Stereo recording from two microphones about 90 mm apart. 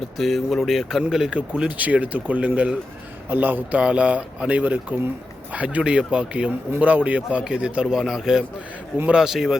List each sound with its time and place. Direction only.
0.2 s speech: centre (ahead or behind)